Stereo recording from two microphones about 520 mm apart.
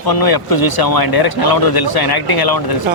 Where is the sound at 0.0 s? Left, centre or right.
Left.